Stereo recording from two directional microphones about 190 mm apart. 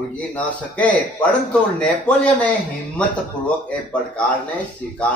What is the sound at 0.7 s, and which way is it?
A man's voice, 5° left (ahead or behind).